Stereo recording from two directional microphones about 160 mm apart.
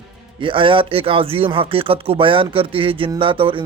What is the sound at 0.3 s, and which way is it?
Speech, 35° right (ahead or behind).